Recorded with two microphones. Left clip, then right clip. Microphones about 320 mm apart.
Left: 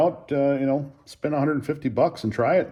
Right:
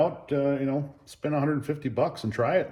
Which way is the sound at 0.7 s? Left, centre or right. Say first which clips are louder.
Left 3 dB; left.